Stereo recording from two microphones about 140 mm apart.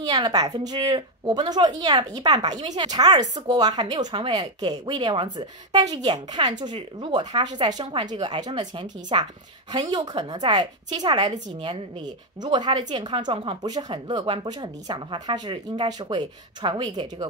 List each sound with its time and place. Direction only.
0.0 s a woman's voice: 30° right (ahead or behind)
13.7 s a woman's voice: 30° right (ahead or behind)